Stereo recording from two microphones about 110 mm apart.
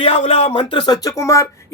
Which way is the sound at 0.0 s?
60° left (ahead or behind).